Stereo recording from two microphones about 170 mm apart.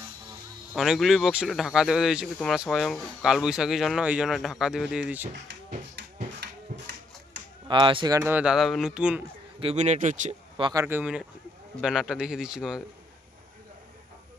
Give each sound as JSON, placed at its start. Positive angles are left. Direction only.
{"t": 0.7, "sound": "speech", "side_deg": 0}
{"t": 6.4, "sound": "music", "side_deg": -70}
{"t": 7.6, "sound": "speech", "side_deg": -30}
{"t": 9.6, "sound": "speech", "side_deg": -40}
{"t": 10.6, "sound": "speech", "side_deg": -20}